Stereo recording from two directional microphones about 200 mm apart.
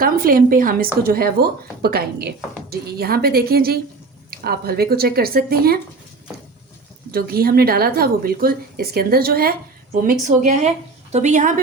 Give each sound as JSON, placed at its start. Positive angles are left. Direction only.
{"t": 0.0, "sound": "speech", "side_deg": -45}
{"t": 7.1, "sound": "speech", "side_deg": -50}